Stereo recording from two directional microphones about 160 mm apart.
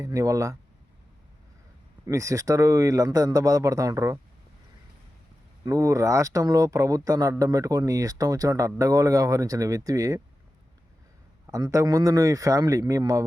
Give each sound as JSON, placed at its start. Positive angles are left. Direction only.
{"t": 0.0, "sound": "speech", "side_deg": -20}
{"t": 2.0, "sound": "speech", "side_deg": -20}
{"t": 5.6, "sound": "speech", "side_deg": -20}
{"t": 11.5, "sound": "speech", "side_deg": -20}